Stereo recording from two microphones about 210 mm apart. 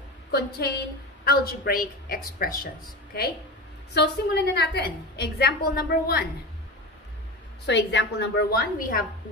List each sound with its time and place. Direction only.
0.3 s a woman's voice: 50° left (ahead or behind)
3.9 s a woman's voice: 50° left (ahead or behind)
7.6 s a woman's voice: 55° left (ahead or behind)